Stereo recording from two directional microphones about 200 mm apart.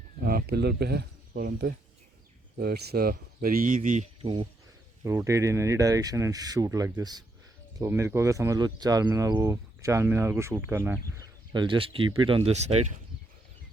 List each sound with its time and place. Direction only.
0.2 s speech: 50° right (ahead or behind)
3.8 s speech: 35° right (ahead or behind)
5.0 s speech: 15° right (ahead or behind)
11.5 s speech: 25° right (ahead or behind)